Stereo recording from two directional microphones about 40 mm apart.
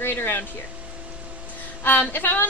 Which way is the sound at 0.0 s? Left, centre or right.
Left.